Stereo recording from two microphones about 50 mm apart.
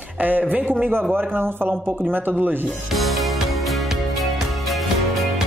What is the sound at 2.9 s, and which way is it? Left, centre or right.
Music, centre.